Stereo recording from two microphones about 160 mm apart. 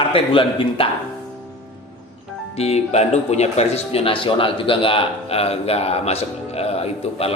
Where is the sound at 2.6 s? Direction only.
40° left (ahead or behind).